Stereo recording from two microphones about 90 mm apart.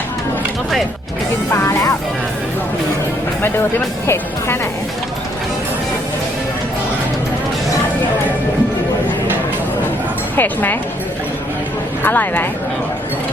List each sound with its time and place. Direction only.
4.0 s speech: 30° left (ahead or behind)
10.3 s speech: 20° left (ahead or behind)
12.0 s speech: 20° left (ahead or behind)